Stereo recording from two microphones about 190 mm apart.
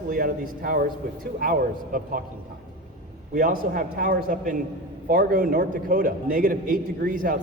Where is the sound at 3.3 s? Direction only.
45° right (ahead or behind).